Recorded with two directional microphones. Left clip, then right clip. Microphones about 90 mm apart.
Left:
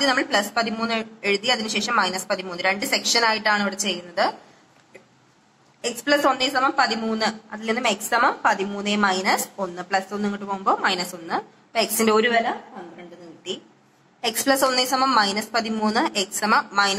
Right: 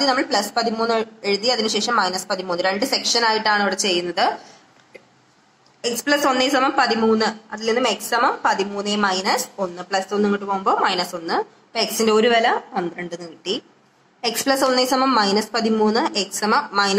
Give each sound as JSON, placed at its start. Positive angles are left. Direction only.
{"t": 0.0, "sound": "a woman's voice", "side_deg": -25}
{"t": 5.8, "sound": "a woman's voice", "side_deg": -30}
{"t": 14.2, "sound": "a woman's voice", "side_deg": -25}